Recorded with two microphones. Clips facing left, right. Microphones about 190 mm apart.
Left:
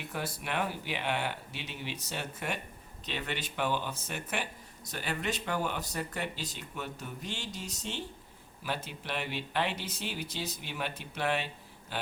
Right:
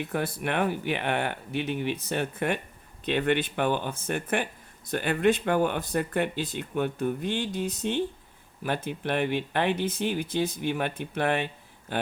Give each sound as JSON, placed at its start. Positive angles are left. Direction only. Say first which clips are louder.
{"t": 0.1, "sound": "speech", "louder": "right 4 dB", "side_deg": -55}